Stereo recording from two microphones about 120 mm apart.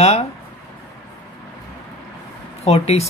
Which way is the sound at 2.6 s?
60° left (ahead or behind).